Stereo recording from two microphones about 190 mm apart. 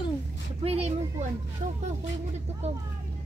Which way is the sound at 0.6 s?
30° right (ahead or behind).